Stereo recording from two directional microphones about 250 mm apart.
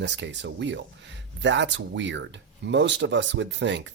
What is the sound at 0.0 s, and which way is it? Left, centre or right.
Speech, right.